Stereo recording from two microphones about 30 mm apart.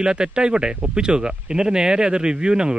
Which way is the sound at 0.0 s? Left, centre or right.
Right.